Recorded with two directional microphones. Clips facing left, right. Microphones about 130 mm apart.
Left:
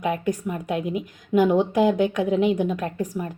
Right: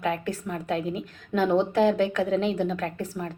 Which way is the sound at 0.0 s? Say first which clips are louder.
Left 4 dB; 15° left (ahead or behind).